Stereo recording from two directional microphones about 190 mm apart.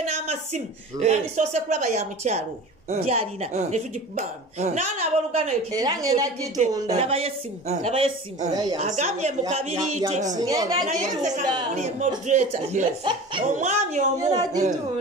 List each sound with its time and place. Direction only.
0.1 s speech: 35° right (ahead or behind)
5.8 s a woman's voice: 20° right (ahead or behind)
6.9 s speech: 30° right (ahead or behind)
8.7 s speech: 40° right (ahead or behind)
10.3 s a woman's voice: 20° right (ahead or behind)
10.9 s speech: 40° right (ahead or behind)
14.1 s a woman's voice: 20° right (ahead or behind)